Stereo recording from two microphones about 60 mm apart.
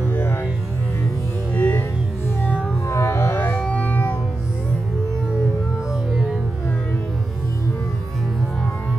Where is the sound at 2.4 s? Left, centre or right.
Centre.